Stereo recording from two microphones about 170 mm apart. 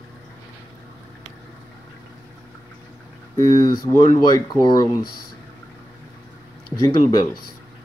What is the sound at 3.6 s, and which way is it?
Speech, 25° left (ahead or behind).